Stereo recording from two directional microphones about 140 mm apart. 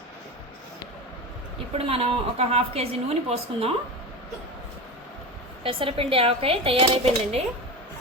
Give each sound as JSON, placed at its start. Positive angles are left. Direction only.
{"t": 1.7, "sound": "a woman's voice", "side_deg": -45}
{"t": 5.6, "sound": "speech", "side_deg": -40}